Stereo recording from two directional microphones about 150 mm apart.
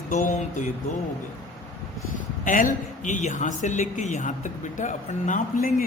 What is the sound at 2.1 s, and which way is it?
Speech, 60° left (ahead or behind).